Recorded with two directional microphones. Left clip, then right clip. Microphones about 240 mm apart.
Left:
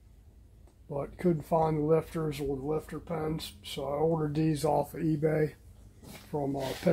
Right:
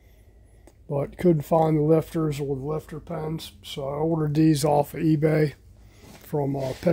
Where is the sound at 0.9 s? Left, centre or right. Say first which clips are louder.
Right 8 dB; right.